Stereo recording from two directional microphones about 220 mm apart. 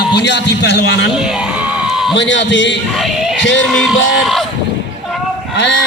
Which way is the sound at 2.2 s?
55° left (ahead or behind).